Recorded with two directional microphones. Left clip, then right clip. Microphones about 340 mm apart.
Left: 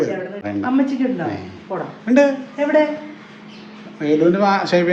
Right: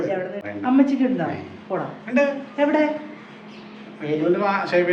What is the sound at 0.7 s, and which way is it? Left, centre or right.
Speech, centre.